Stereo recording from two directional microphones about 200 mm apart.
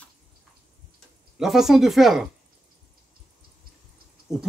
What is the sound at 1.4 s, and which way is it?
Speech, centre (ahead or behind).